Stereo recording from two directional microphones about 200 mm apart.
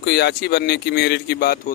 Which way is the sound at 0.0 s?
55° left (ahead or behind).